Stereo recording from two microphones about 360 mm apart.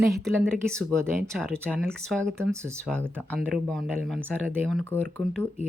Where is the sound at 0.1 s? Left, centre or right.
Centre.